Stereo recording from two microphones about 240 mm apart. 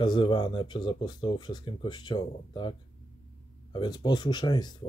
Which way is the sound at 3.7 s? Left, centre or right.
Centre.